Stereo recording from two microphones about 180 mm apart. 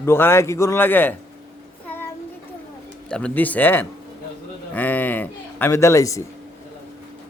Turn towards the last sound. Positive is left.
turn(degrees=15)  # may be behind; listen again after turning